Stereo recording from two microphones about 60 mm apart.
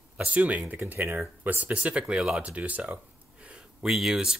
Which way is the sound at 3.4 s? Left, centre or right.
Centre.